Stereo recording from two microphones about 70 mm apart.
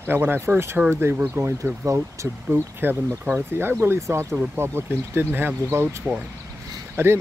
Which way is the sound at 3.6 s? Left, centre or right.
Right.